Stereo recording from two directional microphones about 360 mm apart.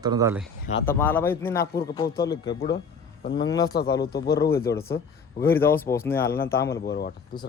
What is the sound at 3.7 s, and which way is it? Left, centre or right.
Speech, left.